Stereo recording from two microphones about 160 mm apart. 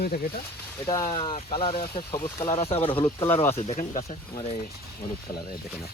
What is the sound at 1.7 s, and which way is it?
Speech, 65° left (ahead or behind).